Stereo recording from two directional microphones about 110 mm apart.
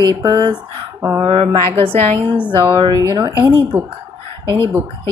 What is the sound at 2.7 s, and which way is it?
Speech, 40° right (ahead or behind).